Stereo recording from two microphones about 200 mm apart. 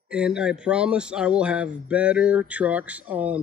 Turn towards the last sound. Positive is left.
turn(degrees=-5)  # may be behind; listen again after turning